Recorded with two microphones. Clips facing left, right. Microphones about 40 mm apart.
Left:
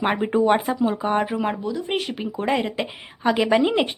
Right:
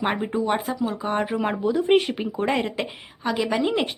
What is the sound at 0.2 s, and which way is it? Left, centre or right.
A woman's voice, left.